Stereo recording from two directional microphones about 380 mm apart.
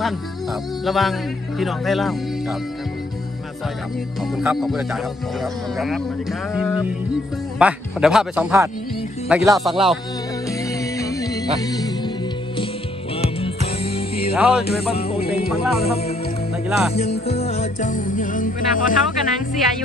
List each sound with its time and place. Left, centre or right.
0.8 s speech: centre
4.4 s speech: centre
10.8 s music: centre
13.4 s music: centre
14.3 s speech: centre
15.0 s speech: centre
15.3 s speech: centre
15.8 s speech: centre
16.6 s speech: centre
16.9 s music: centre